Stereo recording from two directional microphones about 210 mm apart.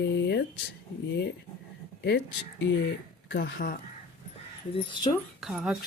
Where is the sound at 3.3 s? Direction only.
60° left (ahead or behind).